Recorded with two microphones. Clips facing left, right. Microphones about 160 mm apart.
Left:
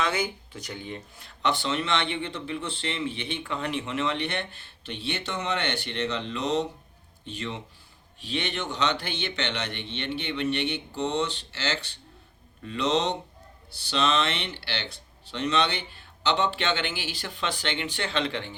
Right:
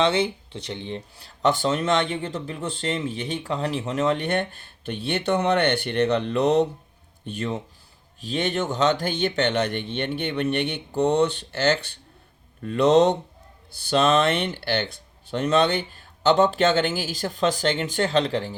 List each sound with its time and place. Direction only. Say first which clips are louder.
0.0 s speech: right 7 dB; 30° right (ahead or behind)